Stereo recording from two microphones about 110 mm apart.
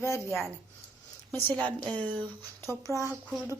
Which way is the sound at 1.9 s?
45° right (ahead or behind).